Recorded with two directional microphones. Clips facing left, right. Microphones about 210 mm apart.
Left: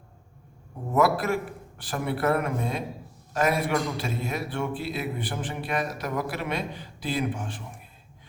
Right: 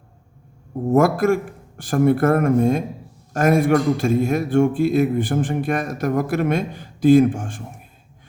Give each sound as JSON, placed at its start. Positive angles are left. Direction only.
{"t": 0.9, "sound": "speech", "side_deg": -45}